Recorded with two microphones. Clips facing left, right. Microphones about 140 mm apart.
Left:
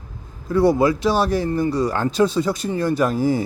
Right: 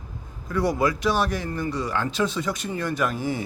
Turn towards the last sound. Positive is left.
turn(degrees=35)  # may be behind; listen again after turning